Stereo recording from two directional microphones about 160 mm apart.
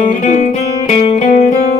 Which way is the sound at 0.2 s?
45° left (ahead or behind).